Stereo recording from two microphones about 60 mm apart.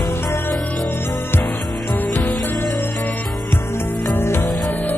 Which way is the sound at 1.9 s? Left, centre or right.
Left.